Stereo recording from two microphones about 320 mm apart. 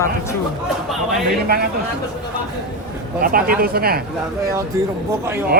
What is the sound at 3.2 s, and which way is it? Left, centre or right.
Speech, right.